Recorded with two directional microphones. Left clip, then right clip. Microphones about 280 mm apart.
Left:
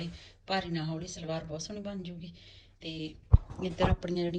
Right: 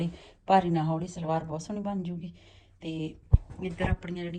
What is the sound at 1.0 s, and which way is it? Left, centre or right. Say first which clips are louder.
Speech: right 6 dB; centre.